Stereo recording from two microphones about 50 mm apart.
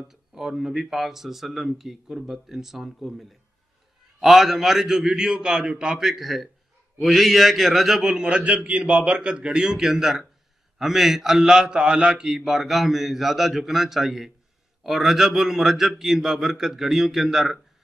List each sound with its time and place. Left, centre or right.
0.1 s a man's voice: centre
6.0 s a man's voice: centre